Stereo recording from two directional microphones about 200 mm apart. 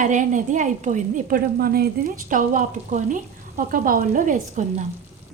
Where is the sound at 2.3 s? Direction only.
40° right (ahead or behind).